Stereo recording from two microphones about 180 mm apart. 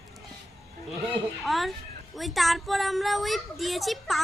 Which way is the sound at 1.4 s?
Centre (ahead or behind).